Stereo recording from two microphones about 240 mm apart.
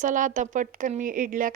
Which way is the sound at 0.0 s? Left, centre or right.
Right.